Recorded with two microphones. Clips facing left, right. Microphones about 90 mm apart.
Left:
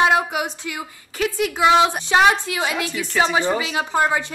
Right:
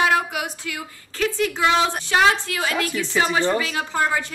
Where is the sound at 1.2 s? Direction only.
10° left (ahead or behind).